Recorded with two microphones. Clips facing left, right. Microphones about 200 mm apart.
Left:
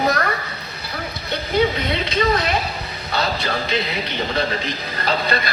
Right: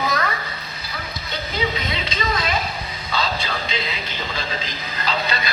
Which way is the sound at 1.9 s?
60° left (ahead or behind).